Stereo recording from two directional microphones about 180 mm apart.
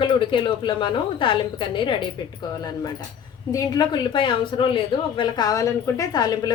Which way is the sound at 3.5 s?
20° left (ahead or behind).